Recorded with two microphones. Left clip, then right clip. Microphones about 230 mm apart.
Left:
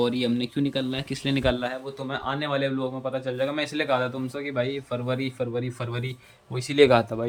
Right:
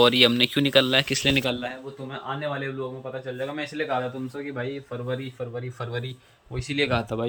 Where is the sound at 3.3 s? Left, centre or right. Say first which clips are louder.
Left 1 dB; centre.